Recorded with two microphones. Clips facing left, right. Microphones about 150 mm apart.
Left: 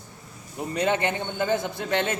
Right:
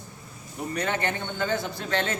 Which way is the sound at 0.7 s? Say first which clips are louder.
Left 4 dB; 20° left (ahead or behind).